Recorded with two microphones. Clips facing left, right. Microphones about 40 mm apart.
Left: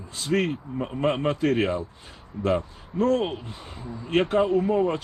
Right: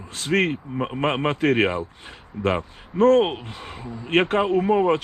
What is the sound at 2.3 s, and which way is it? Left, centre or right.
Speech, right.